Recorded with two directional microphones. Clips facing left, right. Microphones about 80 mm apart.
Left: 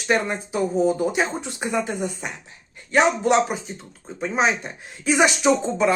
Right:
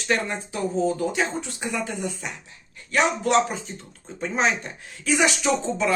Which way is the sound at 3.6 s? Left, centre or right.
Centre.